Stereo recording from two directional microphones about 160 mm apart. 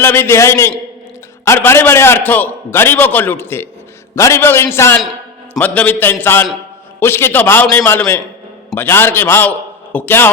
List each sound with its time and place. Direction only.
0.0 s a man's voice: 15° left (ahead or behind)